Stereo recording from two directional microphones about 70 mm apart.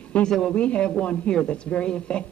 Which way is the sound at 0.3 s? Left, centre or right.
Centre.